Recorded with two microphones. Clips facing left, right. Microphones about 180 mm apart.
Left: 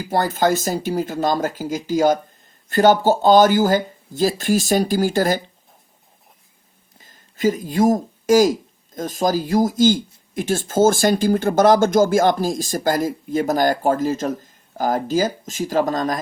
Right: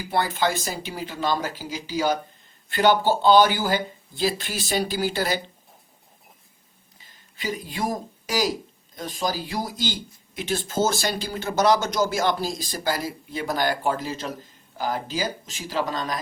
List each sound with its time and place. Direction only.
0.0 s speech: 45° left (ahead or behind)
7.0 s speech: 45° left (ahead or behind)